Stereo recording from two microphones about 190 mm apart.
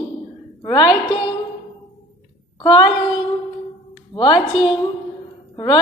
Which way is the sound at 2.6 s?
25° left (ahead or behind).